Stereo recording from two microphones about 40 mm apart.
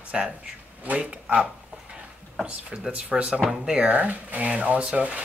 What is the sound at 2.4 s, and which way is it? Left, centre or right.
Speech, right.